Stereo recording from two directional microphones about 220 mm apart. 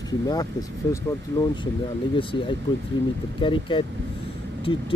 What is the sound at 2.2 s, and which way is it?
Speech, 25° left (ahead or behind).